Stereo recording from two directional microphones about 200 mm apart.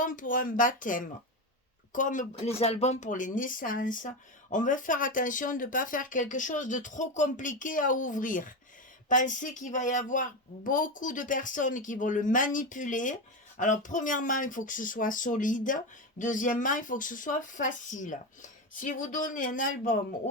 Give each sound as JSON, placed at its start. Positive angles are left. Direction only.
{"t": 0.0, "sound": "speech", "side_deg": 40}